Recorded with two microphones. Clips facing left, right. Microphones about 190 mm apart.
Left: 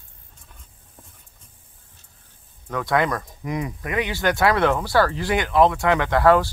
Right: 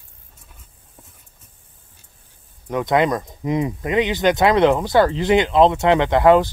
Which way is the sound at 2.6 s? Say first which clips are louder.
Right 4 dB; 20° right (ahead or behind).